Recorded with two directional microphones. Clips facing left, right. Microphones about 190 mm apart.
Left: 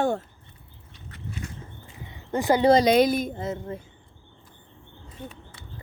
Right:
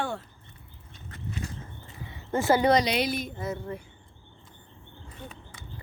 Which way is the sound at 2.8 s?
45° left (ahead or behind).